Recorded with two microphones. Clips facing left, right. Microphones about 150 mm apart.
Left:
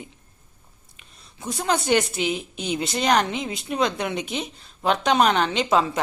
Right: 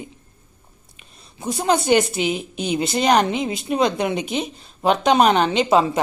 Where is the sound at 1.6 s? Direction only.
5° right (ahead or behind).